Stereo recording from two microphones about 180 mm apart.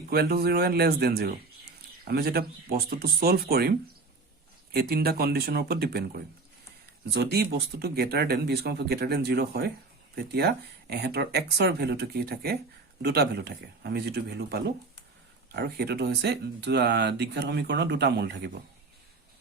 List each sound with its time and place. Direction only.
0.1 s speech: 60° right (ahead or behind)